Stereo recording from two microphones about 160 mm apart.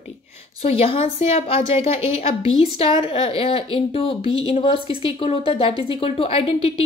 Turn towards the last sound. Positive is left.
turn(degrees=35)  # may be behind; listen again after turning